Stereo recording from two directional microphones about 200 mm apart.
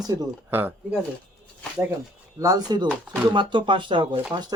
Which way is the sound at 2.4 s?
20° right (ahead or behind).